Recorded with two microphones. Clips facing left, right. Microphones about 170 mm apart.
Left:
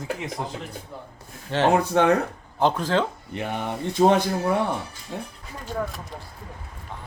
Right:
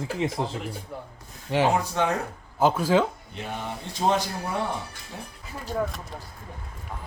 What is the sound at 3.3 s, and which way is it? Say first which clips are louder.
Speech: left 5 dB; 60° left (ahead or behind).